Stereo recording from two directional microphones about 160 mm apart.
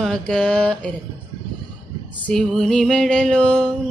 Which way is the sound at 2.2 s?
5° left (ahead or behind).